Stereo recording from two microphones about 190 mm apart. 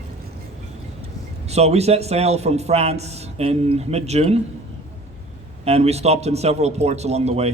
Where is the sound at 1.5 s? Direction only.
35° right (ahead or behind).